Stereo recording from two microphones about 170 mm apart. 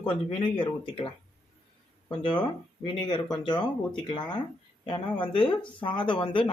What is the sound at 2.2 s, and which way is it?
Speech, 25° left (ahead or behind).